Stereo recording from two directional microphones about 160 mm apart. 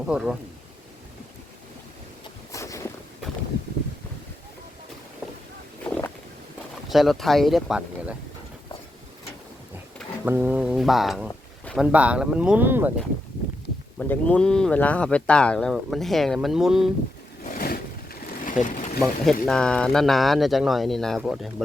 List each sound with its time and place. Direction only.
0.1 s speech: 5° right (ahead or behind)
2.5 s boat: 20° left (ahead or behind)
5.8 s a sound: 10° left (ahead or behind)
6.8 s speech: centre (ahead or behind)
10.2 s speech: 10° right (ahead or behind)
14.1 s speech: 10° left (ahead or behind)
17.4 s vehicle: 60° left (ahead or behind)
18.9 s speech: 5° left (ahead or behind)